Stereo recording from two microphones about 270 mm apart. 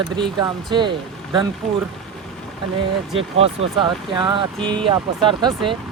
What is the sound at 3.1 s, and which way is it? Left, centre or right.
Speech, centre.